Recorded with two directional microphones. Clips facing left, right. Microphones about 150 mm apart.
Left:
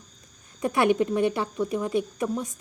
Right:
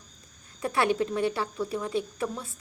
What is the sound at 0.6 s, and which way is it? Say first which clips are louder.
Speech: left 4 dB; 15° left (ahead or behind).